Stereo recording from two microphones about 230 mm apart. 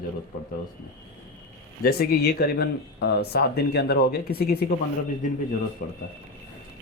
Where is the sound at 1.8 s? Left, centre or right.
Left.